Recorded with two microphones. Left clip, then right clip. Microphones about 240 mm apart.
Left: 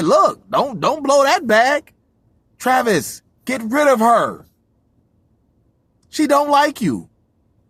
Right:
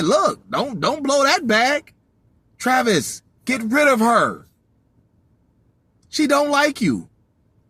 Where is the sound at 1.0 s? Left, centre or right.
Left.